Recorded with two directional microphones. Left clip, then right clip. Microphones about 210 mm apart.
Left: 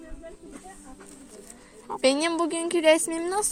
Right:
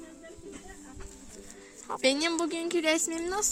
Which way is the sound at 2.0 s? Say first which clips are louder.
Left 4 dB; 15° left (ahead or behind).